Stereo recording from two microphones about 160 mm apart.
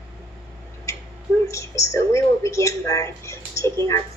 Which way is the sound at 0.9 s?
20° left (ahead or behind).